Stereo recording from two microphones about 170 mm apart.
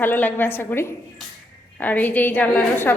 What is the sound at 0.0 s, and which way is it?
A woman's voice, 10° left (ahead or behind).